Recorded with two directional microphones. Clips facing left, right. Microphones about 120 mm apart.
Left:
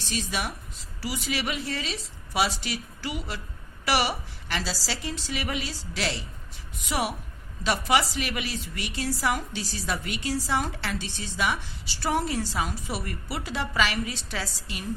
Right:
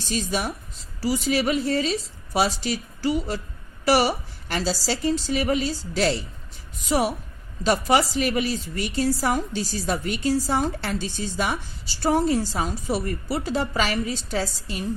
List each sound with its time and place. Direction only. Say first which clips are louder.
0.1 s a woman's voice: right 5 dB; 40° right (ahead or behind)